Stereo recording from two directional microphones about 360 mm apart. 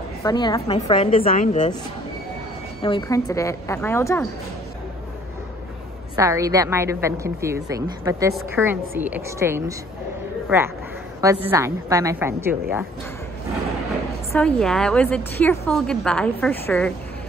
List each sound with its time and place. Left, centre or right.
0.2 s speech: centre
2.8 s speech: centre
6.1 s a woman's voice: centre
11.1 s a woman's voice: centre
14.3 s a woman's voice: centre